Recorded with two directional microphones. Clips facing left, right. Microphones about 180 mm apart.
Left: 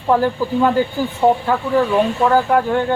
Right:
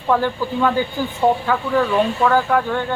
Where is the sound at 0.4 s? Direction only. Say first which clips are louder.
Left 3 dB; 5° left (ahead or behind).